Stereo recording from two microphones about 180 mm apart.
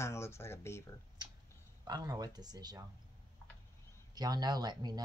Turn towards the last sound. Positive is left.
turn(degrees=-25)  # may be behind; listen again after turning